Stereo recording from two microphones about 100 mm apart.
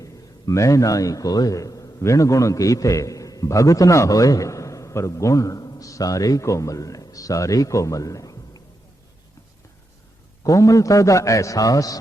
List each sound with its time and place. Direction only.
0.0 s a man's voice: 35° left (ahead or behind)
10.4 s a man's voice: 35° left (ahead or behind)